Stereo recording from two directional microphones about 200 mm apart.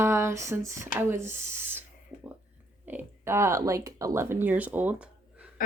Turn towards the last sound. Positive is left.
turn(degrees=-5)  # may be behind; listen again after turning